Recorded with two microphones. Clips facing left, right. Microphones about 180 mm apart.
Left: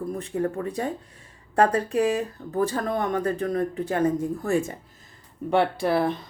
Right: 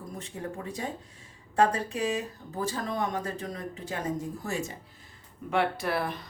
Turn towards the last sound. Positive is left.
turn(degrees=25)  # may be behind; listen again after turning